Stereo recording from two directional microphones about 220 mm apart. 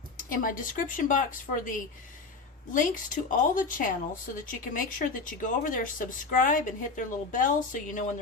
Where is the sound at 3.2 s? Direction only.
40° left (ahead or behind).